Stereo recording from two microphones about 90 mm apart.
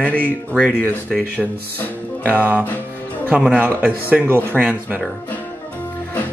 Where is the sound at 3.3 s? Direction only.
15° right (ahead or behind).